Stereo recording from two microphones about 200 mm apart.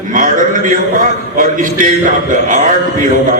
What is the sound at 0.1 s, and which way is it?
A man's voice, 40° right (ahead or behind).